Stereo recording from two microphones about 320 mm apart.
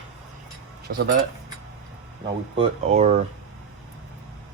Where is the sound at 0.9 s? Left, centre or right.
Right.